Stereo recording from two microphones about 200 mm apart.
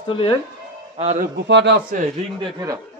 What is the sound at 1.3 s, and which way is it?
Speech, 60° right (ahead or behind).